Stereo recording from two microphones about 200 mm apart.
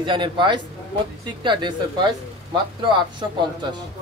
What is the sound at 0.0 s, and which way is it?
Speech, 25° right (ahead or behind).